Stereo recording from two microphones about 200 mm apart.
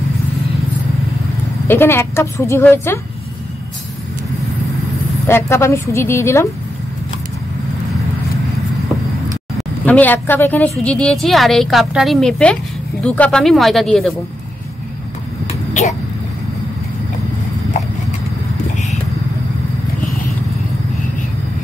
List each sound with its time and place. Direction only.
1.7 s a woman's voice: 10° left (ahead or behind)
5.2 s a woman's voice: 15° left (ahead or behind)
9.6 s a woman's voice: 10° left (ahead or behind)
15.4 s a sound: 35° left (ahead or behind)